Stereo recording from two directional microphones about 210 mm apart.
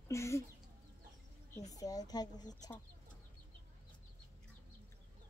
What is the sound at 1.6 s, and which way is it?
Speech, 15° left (ahead or behind).